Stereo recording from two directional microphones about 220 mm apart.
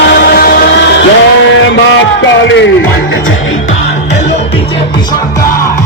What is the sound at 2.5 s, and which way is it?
Speech, 55° left (ahead or behind).